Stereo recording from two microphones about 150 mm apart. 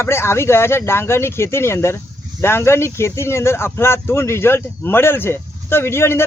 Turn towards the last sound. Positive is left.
turn(degrees=15)  # may be behind; listen again after turning